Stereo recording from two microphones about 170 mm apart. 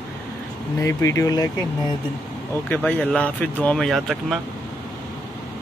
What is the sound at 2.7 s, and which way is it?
Speech, 10° left (ahead or behind).